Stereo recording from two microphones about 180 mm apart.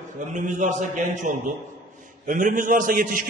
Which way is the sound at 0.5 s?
45° right (ahead or behind).